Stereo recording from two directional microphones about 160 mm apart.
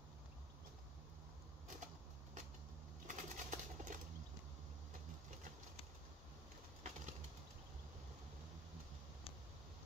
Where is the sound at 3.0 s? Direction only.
55° right (ahead or behind).